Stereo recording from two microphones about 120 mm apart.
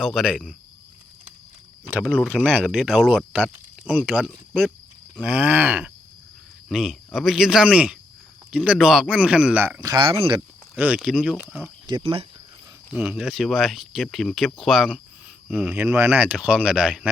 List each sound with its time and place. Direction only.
0.0 s speech: 5° right (ahead or behind)
2.0 s speech: 5° left (ahead or behind); by 9.8 s 15° right (ahead or behind)
9.8 s speech: 35° right (ahead or behind)
10.1 s speech: 45° right (ahead or behind)
10.8 s speech: 10° right (ahead or behind)
11.9 s speech: 45° right (ahead or behind)
12.9 s speech: 5° right (ahead or behind)